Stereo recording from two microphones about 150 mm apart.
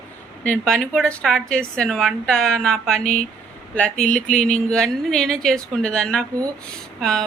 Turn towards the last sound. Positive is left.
turn(degrees=5)  # may be behind; listen again after turning